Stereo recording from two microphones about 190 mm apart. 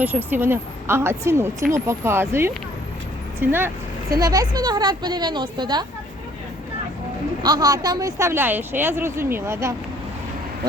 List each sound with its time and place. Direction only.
0.0 s a woman's voice: 10° right (ahead or behind)
7.4 s speech: 20° right (ahead or behind)